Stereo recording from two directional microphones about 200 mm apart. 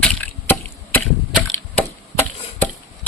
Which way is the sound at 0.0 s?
5° left (ahead or behind).